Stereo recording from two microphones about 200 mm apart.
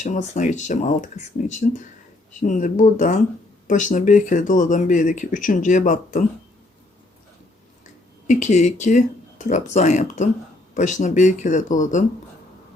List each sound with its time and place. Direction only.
0.0 s speech: 40° left (ahead or behind)
8.3 s speech: 35° left (ahead or behind)